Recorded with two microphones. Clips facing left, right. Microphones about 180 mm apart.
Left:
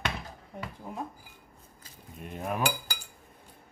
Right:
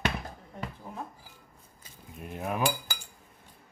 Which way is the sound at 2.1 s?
Centre (ahead or behind).